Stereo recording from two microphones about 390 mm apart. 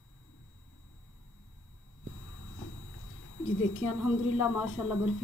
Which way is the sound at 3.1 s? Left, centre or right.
Left.